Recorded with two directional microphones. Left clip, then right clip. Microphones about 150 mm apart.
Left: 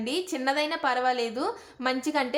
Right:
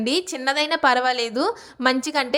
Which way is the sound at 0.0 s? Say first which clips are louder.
Right 6 dB; 45° right (ahead or behind).